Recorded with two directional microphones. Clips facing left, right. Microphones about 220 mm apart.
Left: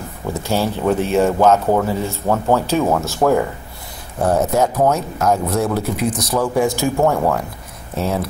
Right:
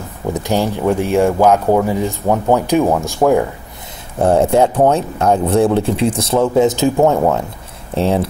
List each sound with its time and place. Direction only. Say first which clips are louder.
0.3 s speech: right 3 dB; 15° right (ahead or behind)
4.2 s speech: right 4 dB; 30° right (ahead or behind)